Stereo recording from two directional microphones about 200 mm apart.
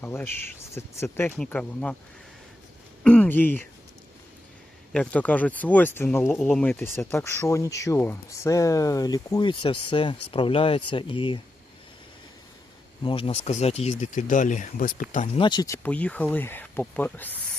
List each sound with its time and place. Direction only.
0.0 s speech: 10° left (ahead or behind)
3.0 s speech: 5° left (ahead or behind)
4.9 s speech: 5° left (ahead or behind); by 11.3 s 25° left (ahead or behind)
13.0 s speech: 25° left (ahead or behind); by 15.0 s 40° left (ahead or behind)
15.4 s speech: 20° left (ahead or behind)